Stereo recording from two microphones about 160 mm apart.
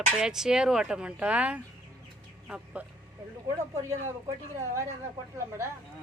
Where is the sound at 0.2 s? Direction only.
5° right (ahead or behind).